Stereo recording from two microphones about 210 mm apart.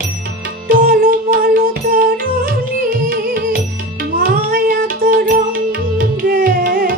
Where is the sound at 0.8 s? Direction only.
40° right (ahead or behind).